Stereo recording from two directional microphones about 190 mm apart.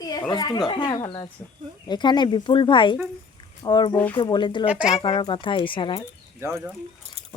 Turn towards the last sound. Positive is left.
turn(degrees=-15)  # may be behind; listen again after turning